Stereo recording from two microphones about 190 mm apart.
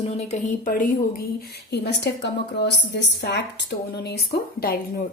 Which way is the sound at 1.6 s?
60° left (ahead or behind).